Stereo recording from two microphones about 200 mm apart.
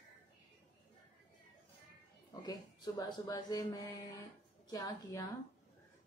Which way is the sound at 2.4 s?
20° left (ahead or behind).